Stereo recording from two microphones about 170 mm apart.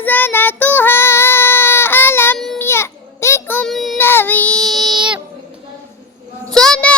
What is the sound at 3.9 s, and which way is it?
Child singing, 15° left (ahead or behind).